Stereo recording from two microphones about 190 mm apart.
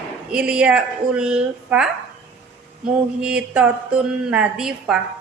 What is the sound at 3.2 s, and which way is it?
A woman's voice, 5° right (ahead or behind).